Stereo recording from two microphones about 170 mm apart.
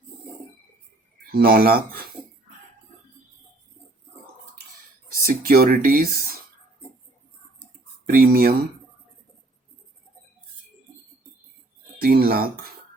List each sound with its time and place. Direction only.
1.3 s speech: 60° right (ahead or behind)
5.2 s speech: 60° right (ahead or behind)
8.0 s speech: 60° right (ahead or behind)
11.9 s speech: 60° right (ahead or behind)